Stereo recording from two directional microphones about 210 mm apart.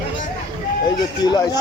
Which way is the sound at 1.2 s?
20° left (ahead or behind).